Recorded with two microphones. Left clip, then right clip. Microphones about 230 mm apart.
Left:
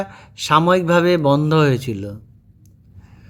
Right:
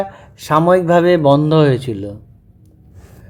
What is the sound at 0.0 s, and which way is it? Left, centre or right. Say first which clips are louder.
A man's voice: right 3 dB; left.